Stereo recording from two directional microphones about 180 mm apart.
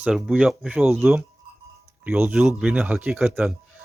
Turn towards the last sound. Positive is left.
turn(degrees=0)  # may be behind; listen again after turning